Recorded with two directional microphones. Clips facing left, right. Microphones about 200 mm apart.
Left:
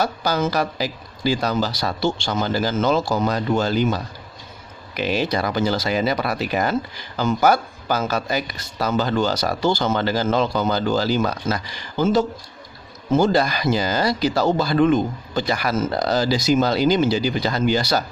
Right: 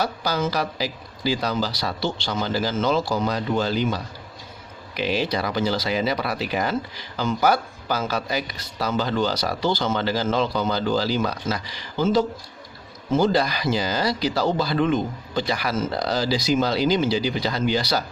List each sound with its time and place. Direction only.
0.0 s speech: 50° left (ahead or behind)